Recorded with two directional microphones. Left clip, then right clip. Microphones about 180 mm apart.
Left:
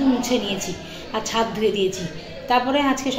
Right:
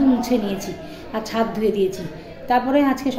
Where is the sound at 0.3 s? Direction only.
25° right (ahead or behind).